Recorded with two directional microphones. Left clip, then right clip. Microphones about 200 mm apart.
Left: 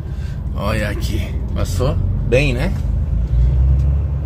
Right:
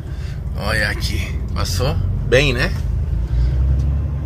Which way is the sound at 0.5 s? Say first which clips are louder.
Right 2 dB; 15° left (ahead or behind).